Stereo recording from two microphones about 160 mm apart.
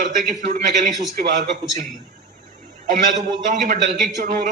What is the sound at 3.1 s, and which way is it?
Speech, 55° right (ahead or behind).